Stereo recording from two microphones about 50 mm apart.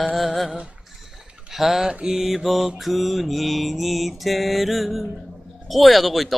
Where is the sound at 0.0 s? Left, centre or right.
Centre.